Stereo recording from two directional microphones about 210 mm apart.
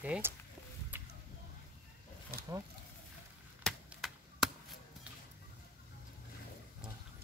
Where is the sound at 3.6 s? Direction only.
Centre (ahead or behind).